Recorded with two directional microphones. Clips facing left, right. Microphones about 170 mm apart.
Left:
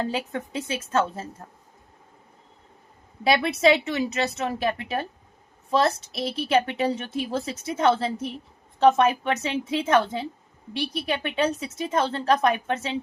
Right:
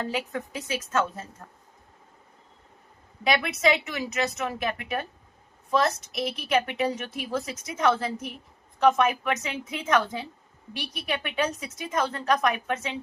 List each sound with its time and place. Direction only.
0.0 s a woman's voice: 30° left (ahead or behind)
3.2 s a woman's voice: 30° left (ahead or behind)